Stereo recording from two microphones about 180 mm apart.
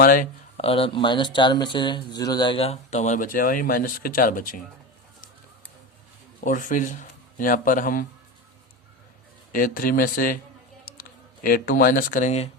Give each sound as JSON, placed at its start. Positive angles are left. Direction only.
{"t": 0.0, "sound": "speech", "side_deg": 50}
{"t": 0.5, "sound": "speech", "side_deg": 30}
{"t": 6.4, "sound": "speech", "side_deg": 45}
{"t": 9.5, "sound": "speech", "side_deg": 50}